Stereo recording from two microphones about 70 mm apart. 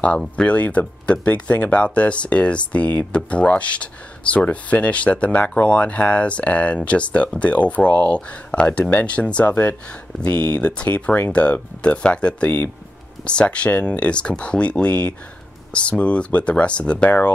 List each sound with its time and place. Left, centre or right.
0.4 s speech: centre